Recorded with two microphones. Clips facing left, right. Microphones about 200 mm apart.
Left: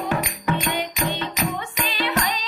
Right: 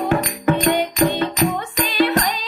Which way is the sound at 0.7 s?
45° right (ahead or behind).